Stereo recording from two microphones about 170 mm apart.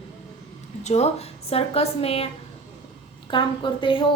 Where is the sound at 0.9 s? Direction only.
40° left (ahead or behind).